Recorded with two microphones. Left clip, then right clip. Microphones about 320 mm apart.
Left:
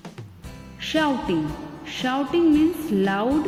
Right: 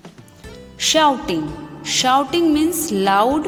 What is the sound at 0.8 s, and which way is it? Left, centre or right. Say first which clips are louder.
A woman's voice: right 8 dB; centre.